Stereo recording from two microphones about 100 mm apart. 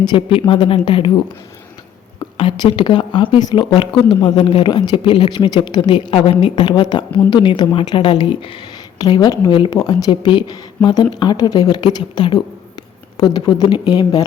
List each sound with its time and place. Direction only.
0.1 s a woman's voice: 60° left (ahead or behind)
2.6 s speech: 50° left (ahead or behind)
9.0 s speech: 45° left (ahead or behind)